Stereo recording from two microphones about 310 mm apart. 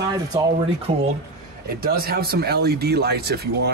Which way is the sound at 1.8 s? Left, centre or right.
Right.